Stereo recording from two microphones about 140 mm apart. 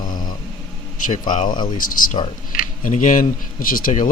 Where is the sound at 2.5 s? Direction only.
65° left (ahead or behind).